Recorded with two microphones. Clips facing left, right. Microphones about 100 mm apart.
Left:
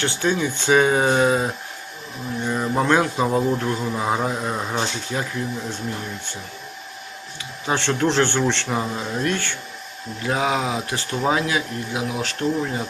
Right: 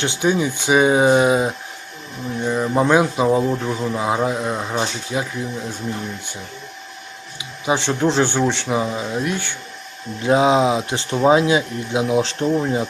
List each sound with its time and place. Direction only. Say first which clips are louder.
0.0 s speech: right 3 dB; 15° right (ahead or behind)
2.5 s a man's voice: right 3 dB; 5° right (ahead or behind)
7.3 s speech: right 3 dB; 10° right (ahead or behind)
8.6 s a man's voice: right 3 dB; 5° right (ahead or behind)
10.2 s speech: right 7 dB; 25° right (ahead or behind)